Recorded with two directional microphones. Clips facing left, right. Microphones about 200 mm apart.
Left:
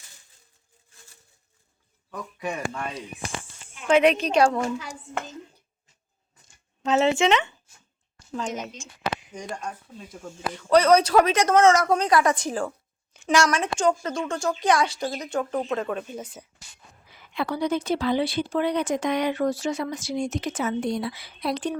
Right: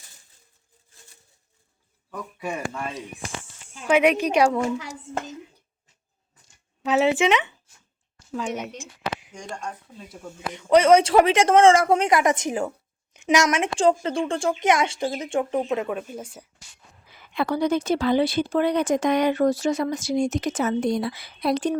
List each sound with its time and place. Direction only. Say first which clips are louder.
2.0 s a woman's voice: even; 5° right (ahead or behind)
6.8 s a woman's voice: right 1 dB; 15° right (ahead or behind)
9.2 s speech: left 1 dB; centre (ahead or behind)
10.5 s a woman's voice: right 2 dB; 20° right (ahead or behind)
15.9 s speech: right 1 dB; 5° right (ahead or behind)
17.3 s speech: right 3 dB; 45° right (ahead or behind)